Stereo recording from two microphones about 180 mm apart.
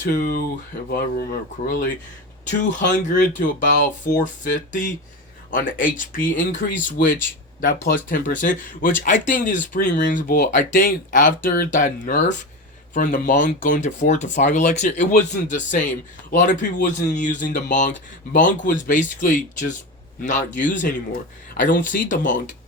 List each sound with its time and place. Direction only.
0.0 s speech: 55° left (ahead or behind)
2.4 s speech: 45° left (ahead or behind)
2.8 s speech: 75° left (ahead or behind)
3.6 s speech: 45° left (ahead or behind)